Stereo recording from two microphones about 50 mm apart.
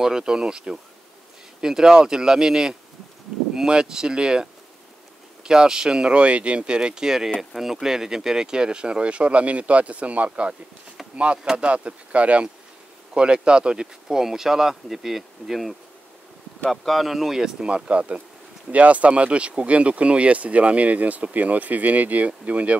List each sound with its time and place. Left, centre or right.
0.0 s speech: centre
11.5 s speech: right; by 15.7 s centre
16.7 s speech: centre; by 22.8 s right